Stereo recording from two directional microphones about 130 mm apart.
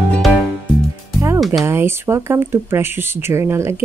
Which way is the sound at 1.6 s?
20° right (ahead or behind).